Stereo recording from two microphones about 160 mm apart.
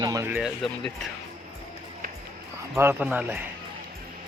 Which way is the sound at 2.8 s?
10° right (ahead or behind).